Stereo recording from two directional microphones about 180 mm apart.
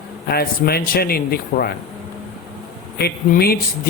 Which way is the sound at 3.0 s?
60° left (ahead or behind).